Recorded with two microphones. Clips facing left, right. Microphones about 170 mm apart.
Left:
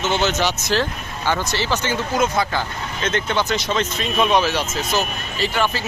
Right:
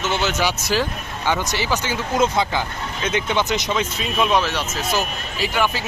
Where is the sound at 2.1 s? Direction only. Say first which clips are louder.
Right 2 dB; 25° right (ahead or behind).